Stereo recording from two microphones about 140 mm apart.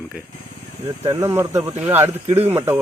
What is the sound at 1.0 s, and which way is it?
Speech, 20° right (ahead or behind).